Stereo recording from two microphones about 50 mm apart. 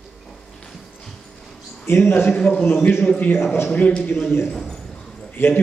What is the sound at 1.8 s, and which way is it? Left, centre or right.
A man's voice, left.